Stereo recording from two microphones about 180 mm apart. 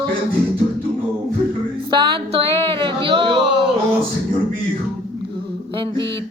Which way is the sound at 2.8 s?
30° right (ahead or behind).